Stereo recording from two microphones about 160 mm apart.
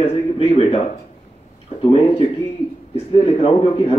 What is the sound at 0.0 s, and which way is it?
Speech, 35° left (ahead or behind).